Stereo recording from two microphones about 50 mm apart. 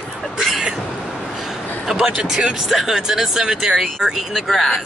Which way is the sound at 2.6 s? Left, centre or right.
Centre.